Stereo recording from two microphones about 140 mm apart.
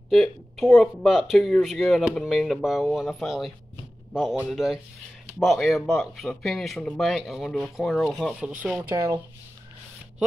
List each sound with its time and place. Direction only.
0.1 s speech: centre (ahead or behind)
8.9 s speech: 25° right (ahead or behind)